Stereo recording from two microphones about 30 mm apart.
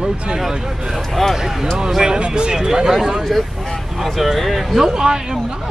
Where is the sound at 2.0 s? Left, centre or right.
Right.